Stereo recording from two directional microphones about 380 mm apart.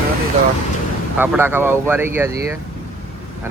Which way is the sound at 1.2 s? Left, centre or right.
Centre.